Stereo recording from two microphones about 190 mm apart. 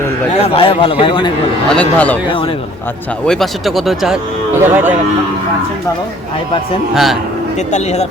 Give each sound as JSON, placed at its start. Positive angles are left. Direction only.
{"t": 0.5, "sound": "a man's voice", "side_deg": 30}
{"t": 1.7, "sound": "a man's voice", "side_deg": 5}
{"t": 3.2, "sound": "speech", "side_deg": 0}
{"t": 6.9, "sound": "speech", "side_deg": 0}
{"t": 7.7, "sound": "speech", "side_deg": 35}